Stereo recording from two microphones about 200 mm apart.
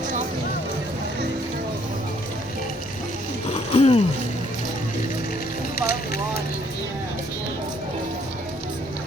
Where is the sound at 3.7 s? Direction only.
30° left (ahead or behind).